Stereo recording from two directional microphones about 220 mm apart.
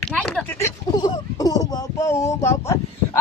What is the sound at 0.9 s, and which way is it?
Speech, 20° left (ahead or behind).